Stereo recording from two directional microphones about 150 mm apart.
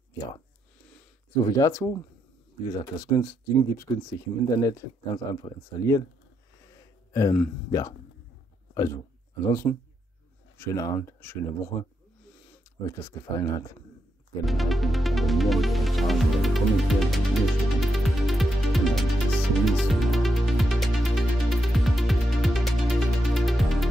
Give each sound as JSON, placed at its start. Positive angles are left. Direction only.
{"t": 1.4, "sound": "speech", "side_deg": 20}
{"t": 2.6, "sound": "speech", "side_deg": 25}
{"t": 6.8, "sound": "a sound", "side_deg": 20}
{"t": 8.7, "sound": "a man's voice", "side_deg": 20}
{"t": 9.7, "sound": "speech", "side_deg": 5}
{"t": 10.6, "sound": "speech", "side_deg": 20}
{"t": 12.8, "sound": "speech", "side_deg": 20}
{"t": 14.4, "sound": "music", "side_deg": 0}